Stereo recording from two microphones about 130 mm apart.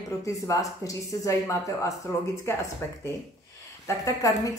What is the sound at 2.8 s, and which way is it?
Speech, 20° left (ahead or behind).